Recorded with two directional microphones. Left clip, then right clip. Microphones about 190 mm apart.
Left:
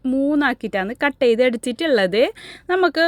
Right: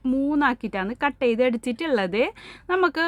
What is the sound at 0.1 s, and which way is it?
Speech, 15° left (ahead or behind).